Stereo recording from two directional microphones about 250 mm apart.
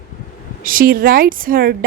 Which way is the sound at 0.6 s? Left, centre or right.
Right.